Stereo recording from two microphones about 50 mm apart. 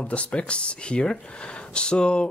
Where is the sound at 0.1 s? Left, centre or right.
Left.